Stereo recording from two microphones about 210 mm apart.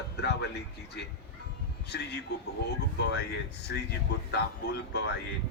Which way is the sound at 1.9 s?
50° left (ahead or behind).